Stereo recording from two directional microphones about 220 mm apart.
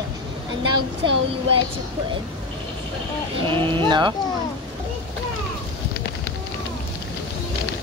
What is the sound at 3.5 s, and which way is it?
Speech, 20° right (ahead or behind).